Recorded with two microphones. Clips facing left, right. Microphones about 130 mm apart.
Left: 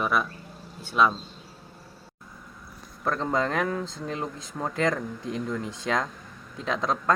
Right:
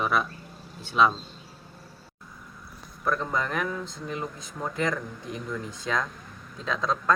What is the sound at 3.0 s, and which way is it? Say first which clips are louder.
Speech: left 2 dB; 25° left (ahead or behind).